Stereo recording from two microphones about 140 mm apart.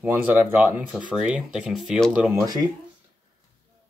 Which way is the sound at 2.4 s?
30° right (ahead or behind).